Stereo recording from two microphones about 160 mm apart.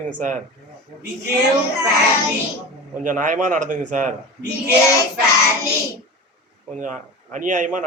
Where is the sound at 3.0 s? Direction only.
55° right (ahead or behind).